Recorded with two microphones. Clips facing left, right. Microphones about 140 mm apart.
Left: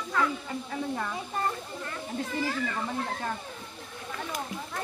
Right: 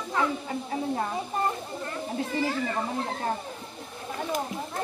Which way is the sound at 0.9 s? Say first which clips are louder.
Right 4 dB; 30° right (ahead or behind).